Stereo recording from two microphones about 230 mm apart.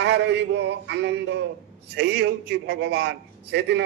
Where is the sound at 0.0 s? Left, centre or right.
Right.